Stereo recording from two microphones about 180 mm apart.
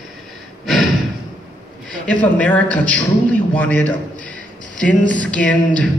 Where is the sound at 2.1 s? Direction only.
10° left (ahead or behind).